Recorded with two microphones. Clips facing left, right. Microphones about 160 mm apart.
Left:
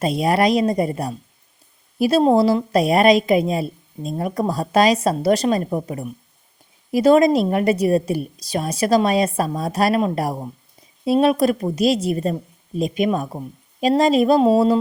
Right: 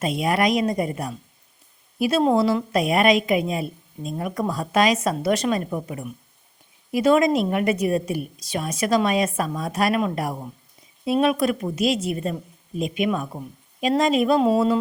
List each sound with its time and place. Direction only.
0.0 s a woman's voice: 35° left (ahead or behind)